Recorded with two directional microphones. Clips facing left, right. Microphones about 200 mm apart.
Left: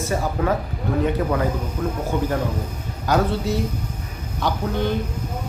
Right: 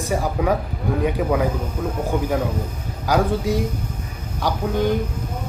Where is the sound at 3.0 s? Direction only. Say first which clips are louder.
Right 1 dB; 10° right (ahead or behind).